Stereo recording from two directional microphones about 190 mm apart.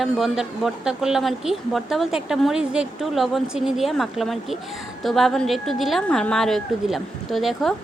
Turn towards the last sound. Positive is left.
turn(degrees=0)  # may be behind; listen again after turning